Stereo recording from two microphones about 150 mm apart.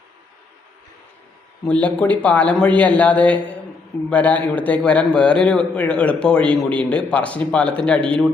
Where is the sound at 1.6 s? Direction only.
10° left (ahead or behind).